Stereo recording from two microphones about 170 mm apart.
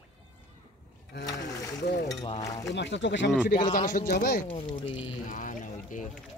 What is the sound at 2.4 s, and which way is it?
Speech, 20° left (ahead or behind).